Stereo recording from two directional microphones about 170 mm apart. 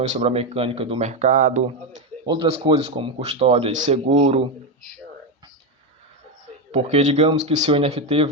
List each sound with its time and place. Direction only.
0.0 s speech: 40° right (ahead or behind)
2.2 s speech: 25° right (ahead or behind)
6.7 s speech: 40° right (ahead or behind)